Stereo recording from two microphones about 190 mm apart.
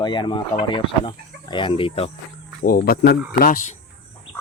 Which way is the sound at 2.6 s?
50° left (ahead or behind).